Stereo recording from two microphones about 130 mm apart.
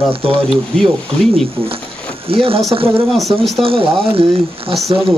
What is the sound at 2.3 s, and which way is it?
Speech, 45° right (ahead or behind).